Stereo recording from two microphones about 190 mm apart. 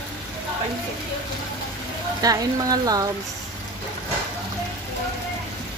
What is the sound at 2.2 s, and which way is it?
Speech, 20° right (ahead or behind).